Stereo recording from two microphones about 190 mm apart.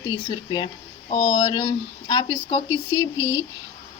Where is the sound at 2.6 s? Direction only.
90° left.